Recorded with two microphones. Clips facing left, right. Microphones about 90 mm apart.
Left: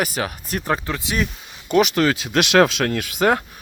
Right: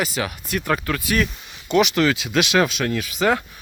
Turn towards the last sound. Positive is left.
turn(degrees=45)  # may be behind; listen again after turning